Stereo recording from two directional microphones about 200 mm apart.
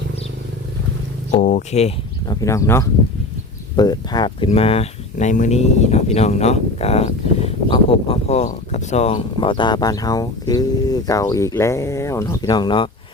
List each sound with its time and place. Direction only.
1.4 s speech: 35° left (ahead or behind)
2.2 s speech: 20° left (ahead or behind)